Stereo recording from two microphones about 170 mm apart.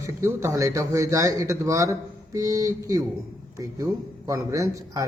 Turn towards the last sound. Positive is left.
turn(degrees=-20)  # may be behind; listen again after turning